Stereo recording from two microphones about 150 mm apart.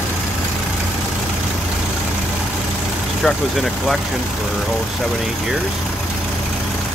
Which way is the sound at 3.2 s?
Centre (ahead or behind).